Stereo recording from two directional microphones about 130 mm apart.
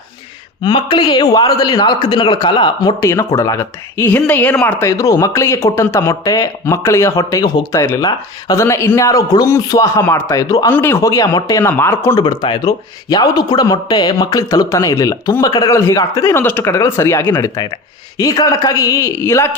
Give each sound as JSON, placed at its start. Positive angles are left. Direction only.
{"t": 0.6, "sound": "a man's voice", "side_deg": 35}
{"t": 3.0, "sound": "speech", "side_deg": 25}
{"t": 10.7, "sound": "speech", "side_deg": 15}
{"t": 12.1, "sound": "speech", "side_deg": 40}